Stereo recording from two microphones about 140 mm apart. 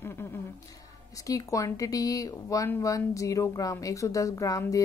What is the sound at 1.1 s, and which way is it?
Speech, 25° left (ahead or behind).